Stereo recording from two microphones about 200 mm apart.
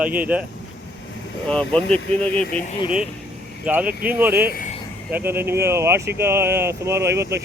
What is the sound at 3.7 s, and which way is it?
Speech, 10° right (ahead or behind).